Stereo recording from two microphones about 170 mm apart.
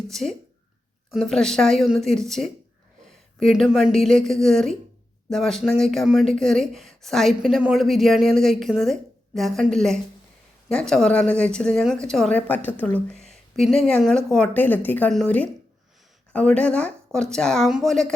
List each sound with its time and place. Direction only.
0.1 s speech: centre (ahead or behind)